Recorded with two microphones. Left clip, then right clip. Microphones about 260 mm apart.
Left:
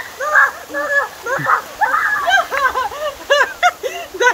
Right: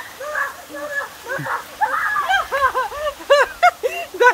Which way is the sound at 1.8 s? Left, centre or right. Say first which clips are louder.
Left 4 dB; centre.